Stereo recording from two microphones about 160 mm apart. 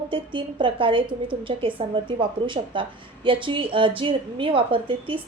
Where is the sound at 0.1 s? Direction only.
30° right (ahead or behind).